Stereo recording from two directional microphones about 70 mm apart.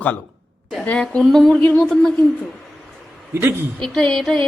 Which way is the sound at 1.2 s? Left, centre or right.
Centre.